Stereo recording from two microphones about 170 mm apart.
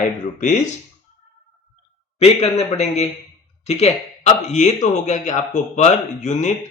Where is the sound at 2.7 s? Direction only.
40° left (ahead or behind).